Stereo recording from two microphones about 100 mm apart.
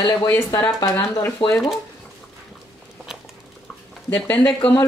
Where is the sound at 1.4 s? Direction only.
60° left (ahead or behind).